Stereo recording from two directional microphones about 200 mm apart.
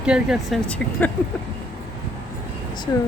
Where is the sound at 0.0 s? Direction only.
5° right (ahead or behind).